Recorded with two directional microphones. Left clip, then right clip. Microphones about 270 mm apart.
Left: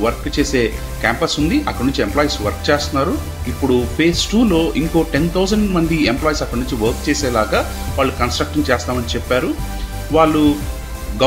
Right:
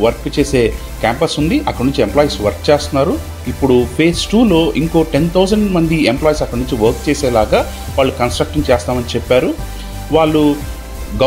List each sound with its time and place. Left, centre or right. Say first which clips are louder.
0.0 s speech: right 4 dB; centre